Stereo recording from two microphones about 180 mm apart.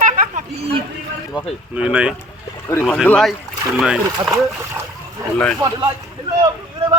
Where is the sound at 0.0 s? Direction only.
45° right (ahead or behind).